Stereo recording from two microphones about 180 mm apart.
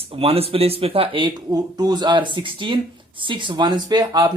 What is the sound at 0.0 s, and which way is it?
A man's voice, 30° right (ahead or behind).